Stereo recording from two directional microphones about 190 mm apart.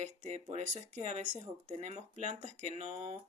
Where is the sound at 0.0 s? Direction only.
40° right (ahead or behind).